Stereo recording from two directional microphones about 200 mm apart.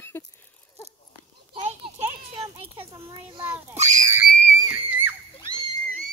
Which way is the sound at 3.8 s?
35° right (ahead or behind).